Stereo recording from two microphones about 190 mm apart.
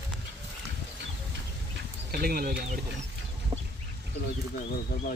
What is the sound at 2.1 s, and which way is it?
Speech, 55° right (ahead or behind).